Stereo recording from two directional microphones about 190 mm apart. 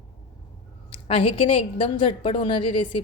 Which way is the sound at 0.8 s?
30° left (ahead or behind).